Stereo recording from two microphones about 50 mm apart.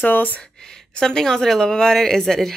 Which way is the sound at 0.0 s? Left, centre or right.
Left.